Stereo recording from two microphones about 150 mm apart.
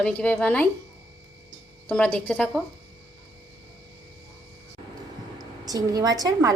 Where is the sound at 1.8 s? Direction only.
10° left (ahead or behind).